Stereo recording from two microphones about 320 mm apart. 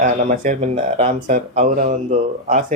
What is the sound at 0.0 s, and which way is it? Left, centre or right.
Speech, right.